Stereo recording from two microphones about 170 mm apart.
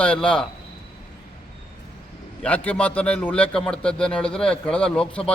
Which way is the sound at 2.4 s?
10° left (ahead or behind).